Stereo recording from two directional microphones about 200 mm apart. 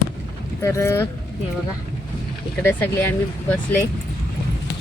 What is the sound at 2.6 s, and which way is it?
Speech, 10° left (ahead or behind).